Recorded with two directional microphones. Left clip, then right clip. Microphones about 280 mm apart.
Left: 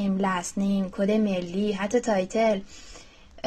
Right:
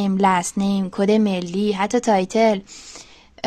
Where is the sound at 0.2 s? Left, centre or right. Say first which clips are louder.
Right 12 dB; right.